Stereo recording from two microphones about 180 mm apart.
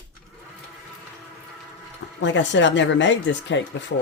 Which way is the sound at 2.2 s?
90° left.